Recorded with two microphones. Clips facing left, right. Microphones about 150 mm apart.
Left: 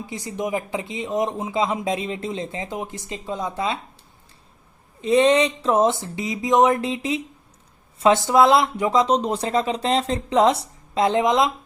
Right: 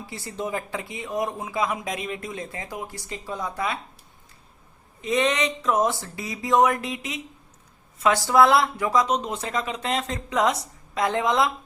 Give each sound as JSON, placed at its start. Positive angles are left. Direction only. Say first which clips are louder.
{"t": 0.0, "sound": "speech", "louder": "left 4 dB", "side_deg": 20}
{"t": 4.9, "sound": "speech", "louder": "left 7 dB", "side_deg": 30}